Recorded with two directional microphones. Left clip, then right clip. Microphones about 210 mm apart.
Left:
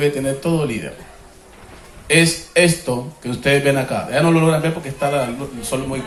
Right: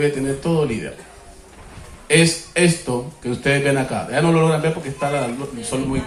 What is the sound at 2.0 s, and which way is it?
Speech, 55° left (ahead or behind).